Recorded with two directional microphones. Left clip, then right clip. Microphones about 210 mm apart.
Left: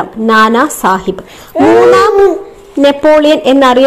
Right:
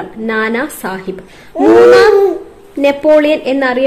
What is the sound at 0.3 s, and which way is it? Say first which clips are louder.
Speech: left 8 dB; 15° left (ahead or behind).